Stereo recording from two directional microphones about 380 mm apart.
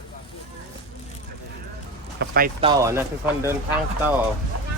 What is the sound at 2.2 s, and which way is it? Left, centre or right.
Speech, right.